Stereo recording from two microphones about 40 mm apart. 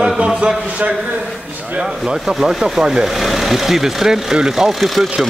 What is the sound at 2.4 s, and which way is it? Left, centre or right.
Speech, centre.